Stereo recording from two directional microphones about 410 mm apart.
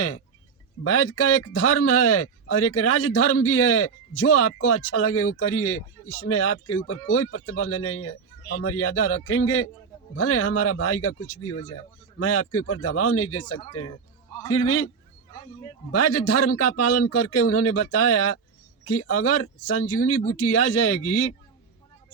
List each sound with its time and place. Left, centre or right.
0.9 s speech: left
15.9 s speech: left